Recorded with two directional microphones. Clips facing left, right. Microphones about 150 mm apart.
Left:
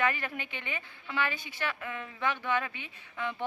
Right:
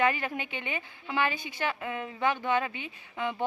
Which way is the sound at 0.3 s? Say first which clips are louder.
Right 4 dB; 20° right (ahead or behind).